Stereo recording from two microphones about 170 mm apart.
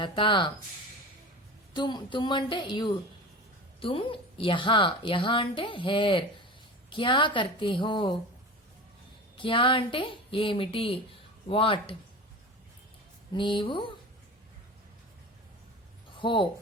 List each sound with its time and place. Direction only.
0.0 s a woman's voice: 30° left (ahead or behind)
1.7 s a woman's voice: 25° left (ahead or behind)
9.4 s speech: 30° left (ahead or behind)
13.3 s a woman's voice: 30° left (ahead or behind)
16.1 s speech: 30° left (ahead or behind)